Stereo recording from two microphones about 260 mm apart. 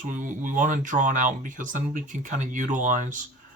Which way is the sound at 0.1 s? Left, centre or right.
Right.